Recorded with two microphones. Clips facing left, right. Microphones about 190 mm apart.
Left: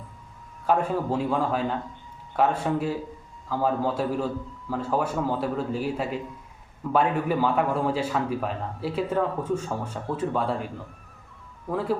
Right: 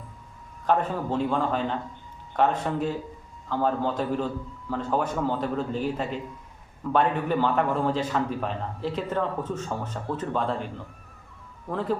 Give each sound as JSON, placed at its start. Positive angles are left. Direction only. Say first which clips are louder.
{"t": 0.7, "sound": "a man's voice", "louder": "left 1 dB", "side_deg": 5}
{"t": 11.7, "sound": "a man's voice", "louder": "left 1 dB", "side_deg": 5}